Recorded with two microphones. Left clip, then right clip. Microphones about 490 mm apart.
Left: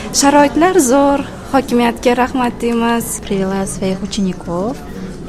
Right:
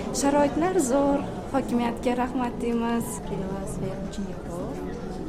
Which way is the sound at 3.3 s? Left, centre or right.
Left.